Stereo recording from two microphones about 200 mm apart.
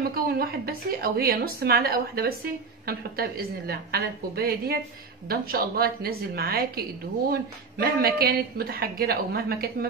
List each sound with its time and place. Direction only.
0.1 s a woman's voice: 50° right (ahead or behind)